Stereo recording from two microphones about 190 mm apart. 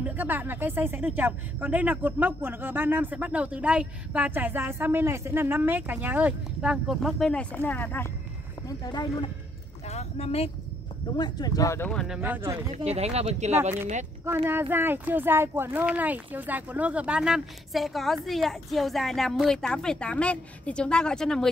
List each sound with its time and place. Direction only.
0.0 s speech: 10° right (ahead or behind); by 8.1 s 10° left (ahead or behind)
8.6 s speech: 20° left (ahead or behind)
9.8 s speech: 35° left (ahead or behind)
11.1 s speech: 20° left (ahead or behind)
11.9 s speech: 5° left (ahead or behind)
12.2 s speech: 10° right (ahead or behind)
12.7 s speech: 35° right (ahead or behind)
14.2 s speech: 10° right (ahead or behind)